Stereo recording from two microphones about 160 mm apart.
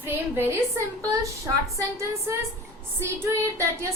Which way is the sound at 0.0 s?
15° right (ahead or behind).